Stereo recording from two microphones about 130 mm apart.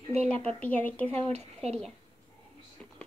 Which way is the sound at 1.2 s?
55° right (ahead or behind).